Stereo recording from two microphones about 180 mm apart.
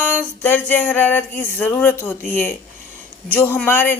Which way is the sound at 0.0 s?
10° left (ahead or behind).